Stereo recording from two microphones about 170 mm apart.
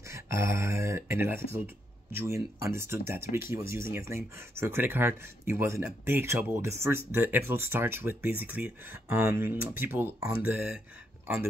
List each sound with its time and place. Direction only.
0.1 s speech: 15° right (ahead or behind)